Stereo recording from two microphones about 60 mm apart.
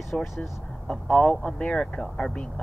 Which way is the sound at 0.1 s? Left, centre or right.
Centre.